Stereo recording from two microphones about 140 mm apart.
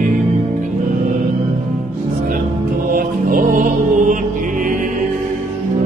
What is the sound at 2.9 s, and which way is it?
Music, 75° right (ahead or behind).